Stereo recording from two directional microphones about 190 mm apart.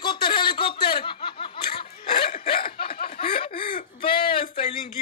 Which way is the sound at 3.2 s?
30° left (ahead or behind).